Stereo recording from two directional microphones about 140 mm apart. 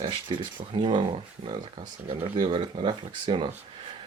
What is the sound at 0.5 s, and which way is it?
Speech, 35° right (ahead or behind).